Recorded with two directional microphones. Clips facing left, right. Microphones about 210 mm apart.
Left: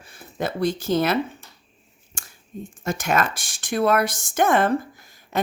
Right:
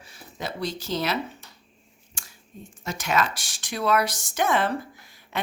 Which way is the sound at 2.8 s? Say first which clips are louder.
Left 3 dB; 50° left (ahead or behind).